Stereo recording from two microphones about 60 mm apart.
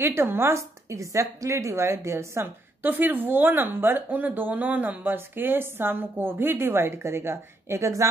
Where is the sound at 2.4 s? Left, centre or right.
Right.